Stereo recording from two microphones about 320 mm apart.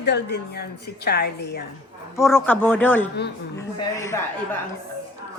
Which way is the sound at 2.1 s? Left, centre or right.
Centre.